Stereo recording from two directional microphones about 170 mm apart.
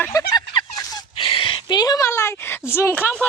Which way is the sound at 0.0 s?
20° left (ahead or behind).